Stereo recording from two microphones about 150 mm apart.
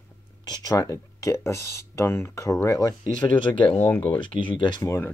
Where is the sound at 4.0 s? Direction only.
35° left (ahead or behind).